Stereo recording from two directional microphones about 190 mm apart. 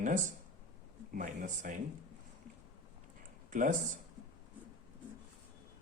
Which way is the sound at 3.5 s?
45° right (ahead or behind).